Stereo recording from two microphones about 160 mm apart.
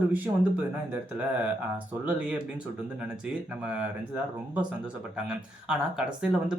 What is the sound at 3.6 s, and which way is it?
Speech, 10° right (ahead or behind).